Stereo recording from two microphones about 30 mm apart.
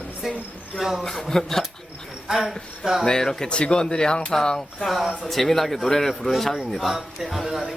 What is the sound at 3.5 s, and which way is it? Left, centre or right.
Speech, left.